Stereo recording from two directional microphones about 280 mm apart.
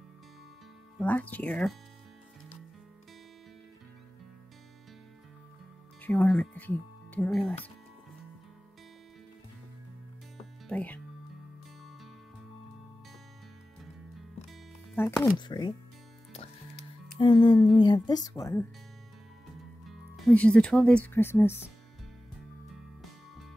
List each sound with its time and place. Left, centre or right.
0.9 s speech: centre
6.0 s speech: centre
10.7 s speech: centre
14.5 s music: centre
15.3 s speech: centre
17.2 s speech: centre
19.9 s speech: centre